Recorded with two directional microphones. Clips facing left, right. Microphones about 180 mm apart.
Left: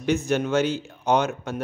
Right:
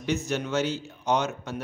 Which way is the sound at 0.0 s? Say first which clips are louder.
Left 5 dB; 55° left (ahead or behind).